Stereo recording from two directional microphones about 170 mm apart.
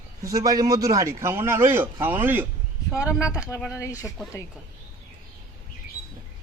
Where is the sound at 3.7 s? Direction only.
20° left (ahead or behind).